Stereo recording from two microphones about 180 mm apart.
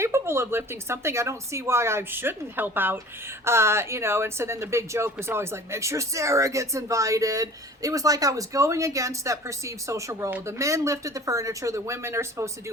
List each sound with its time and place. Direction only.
0.0 s speech: 15° right (ahead or behind)